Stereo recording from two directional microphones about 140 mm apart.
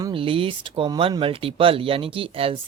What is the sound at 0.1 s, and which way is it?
Speech, 40° right (ahead or behind).